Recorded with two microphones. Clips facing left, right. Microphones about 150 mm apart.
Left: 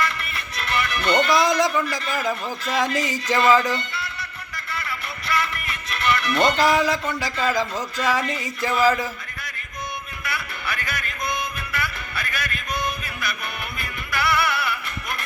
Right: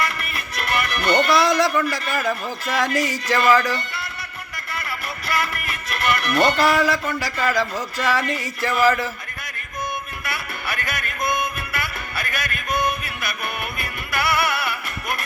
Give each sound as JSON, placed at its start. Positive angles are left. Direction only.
{"t": 0.3, "sound": "music", "side_deg": -50}
{"t": 1.3, "sound": "a man's voice", "side_deg": 15}
{"t": 5.3, "sound": "music", "side_deg": -50}
{"t": 6.3, "sound": "a man's voice", "side_deg": 20}
{"t": 10.2, "sound": "music", "side_deg": -50}